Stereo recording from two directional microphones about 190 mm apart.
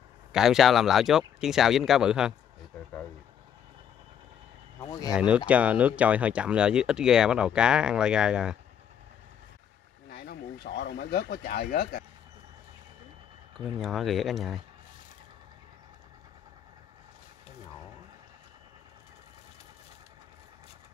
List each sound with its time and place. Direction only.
0.3 s speech: centre (ahead or behind)
5.1 s speech: 5° right (ahead or behind)
10.0 s speech: 55° left (ahead or behind)
13.7 s speech: centre (ahead or behind)